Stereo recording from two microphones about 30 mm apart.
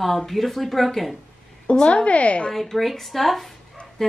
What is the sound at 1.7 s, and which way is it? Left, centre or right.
Speech, left.